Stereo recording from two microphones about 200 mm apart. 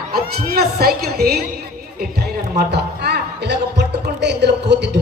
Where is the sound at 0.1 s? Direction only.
50° right (ahead or behind).